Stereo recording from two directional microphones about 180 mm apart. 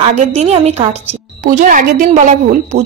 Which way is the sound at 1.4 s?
45° right (ahead or behind).